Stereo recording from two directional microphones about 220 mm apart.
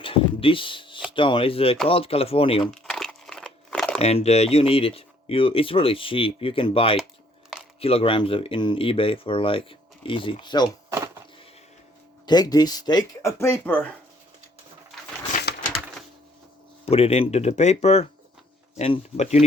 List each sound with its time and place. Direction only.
0.0 s a sound: 25° left (ahead or behind)
1.1 s speech: 25° left (ahead or behind)
2.8 s crumpling: centre (ahead or behind)
3.9 s speech: 30° left (ahead or behind)
12.2 s speech: 20° left (ahead or behind)
15.3 s a sound: 35° left (ahead or behind)
16.8 s speech: 25° left (ahead or behind)